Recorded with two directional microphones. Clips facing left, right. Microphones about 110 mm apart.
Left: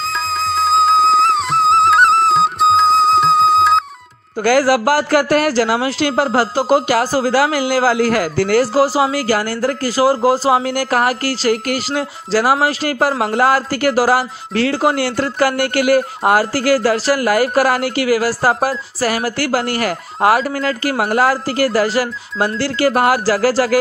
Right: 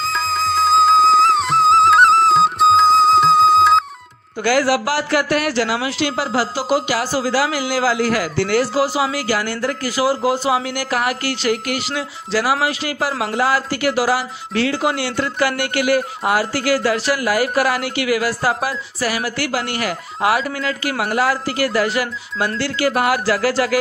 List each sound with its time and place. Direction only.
0.0 s music: centre (ahead or behind)
4.4 s speech: 45° left (ahead or behind)